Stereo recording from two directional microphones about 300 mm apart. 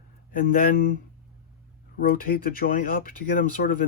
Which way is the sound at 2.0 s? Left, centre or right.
Left.